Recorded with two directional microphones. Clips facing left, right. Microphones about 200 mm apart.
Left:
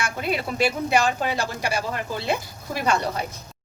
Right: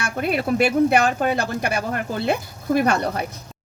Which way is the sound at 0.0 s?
55° right (ahead or behind).